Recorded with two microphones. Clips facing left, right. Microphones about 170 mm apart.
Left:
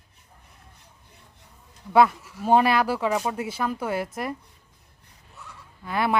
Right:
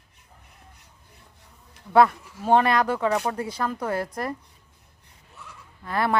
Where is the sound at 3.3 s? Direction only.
25° left (ahead or behind).